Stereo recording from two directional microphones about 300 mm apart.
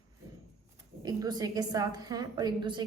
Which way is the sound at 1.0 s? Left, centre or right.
Centre.